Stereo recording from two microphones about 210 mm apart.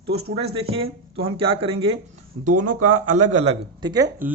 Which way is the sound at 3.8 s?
20° right (ahead or behind).